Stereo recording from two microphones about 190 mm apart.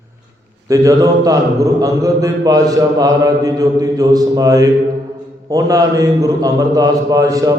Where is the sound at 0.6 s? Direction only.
20° right (ahead or behind).